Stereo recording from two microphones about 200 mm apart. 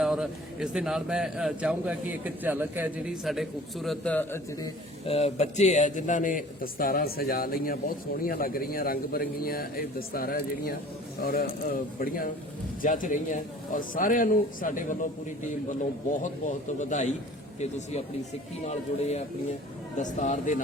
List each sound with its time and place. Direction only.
0.0 s a man's voice: 5° right (ahead or behind)
5.0 s a man's voice: 30° left (ahead or behind)
16.5 s a man's voice: 40° left (ahead or behind)